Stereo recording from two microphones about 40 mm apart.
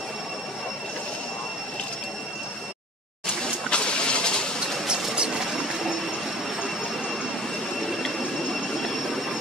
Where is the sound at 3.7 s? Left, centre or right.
Left.